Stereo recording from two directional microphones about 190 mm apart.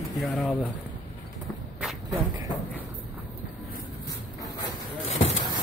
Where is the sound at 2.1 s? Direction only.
15° right (ahead or behind).